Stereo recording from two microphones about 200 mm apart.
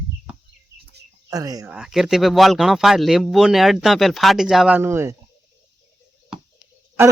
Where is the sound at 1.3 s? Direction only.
20° right (ahead or behind).